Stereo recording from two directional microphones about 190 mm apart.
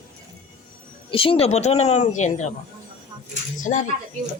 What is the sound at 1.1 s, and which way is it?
Speech, 30° left (ahead or behind).